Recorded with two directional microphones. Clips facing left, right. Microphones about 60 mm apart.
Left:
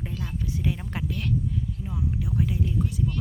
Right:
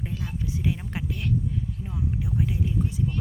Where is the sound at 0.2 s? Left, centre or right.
Centre.